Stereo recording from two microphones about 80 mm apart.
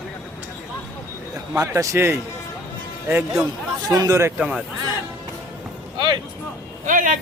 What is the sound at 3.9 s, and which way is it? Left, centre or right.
Speech, right.